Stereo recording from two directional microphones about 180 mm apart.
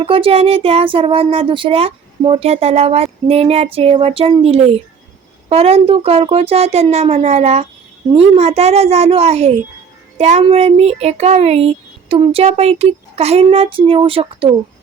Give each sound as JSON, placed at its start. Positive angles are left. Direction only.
{"t": 0.0, "sound": "speech", "side_deg": -30}